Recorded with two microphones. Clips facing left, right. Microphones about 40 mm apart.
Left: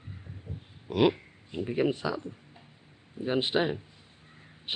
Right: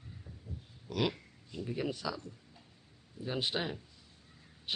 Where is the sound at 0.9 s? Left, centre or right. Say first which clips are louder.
Left 9 dB; left.